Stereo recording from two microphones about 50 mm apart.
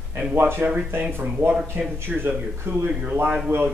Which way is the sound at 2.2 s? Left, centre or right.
Right.